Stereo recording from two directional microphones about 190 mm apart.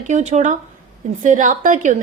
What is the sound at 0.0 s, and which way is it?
A woman's voice, 35° right (ahead or behind).